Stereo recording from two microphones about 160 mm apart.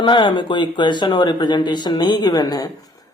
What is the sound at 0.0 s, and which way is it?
Speech, 30° left (ahead or behind).